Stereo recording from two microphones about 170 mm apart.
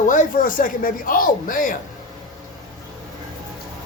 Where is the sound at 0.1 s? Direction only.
50° left (ahead or behind).